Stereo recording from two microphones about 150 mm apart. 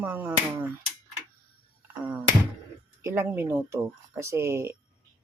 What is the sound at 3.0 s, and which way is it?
Speech, 15° right (ahead or behind).